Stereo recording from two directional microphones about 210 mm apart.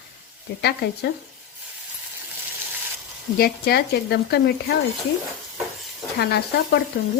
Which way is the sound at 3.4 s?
50° left (ahead or behind).